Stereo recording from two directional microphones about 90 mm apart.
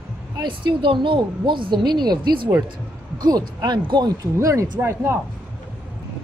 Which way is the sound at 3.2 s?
50° right (ahead or behind).